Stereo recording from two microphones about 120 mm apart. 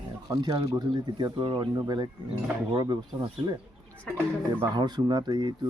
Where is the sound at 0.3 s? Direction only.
30° right (ahead or behind).